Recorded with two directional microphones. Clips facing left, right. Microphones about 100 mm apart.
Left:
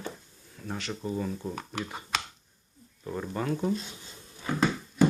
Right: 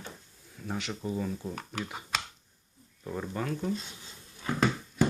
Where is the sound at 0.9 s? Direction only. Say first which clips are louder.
Left 3 dB; centre (ahead or behind).